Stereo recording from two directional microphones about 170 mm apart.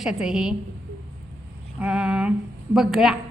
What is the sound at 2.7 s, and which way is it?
Speech, centre (ahead or behind).